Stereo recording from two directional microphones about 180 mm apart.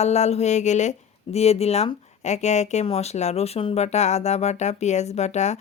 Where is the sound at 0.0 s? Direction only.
35° left (ahead or behind).